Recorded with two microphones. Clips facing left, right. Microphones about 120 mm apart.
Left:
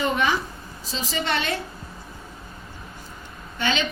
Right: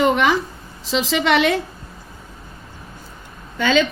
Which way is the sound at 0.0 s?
80° right.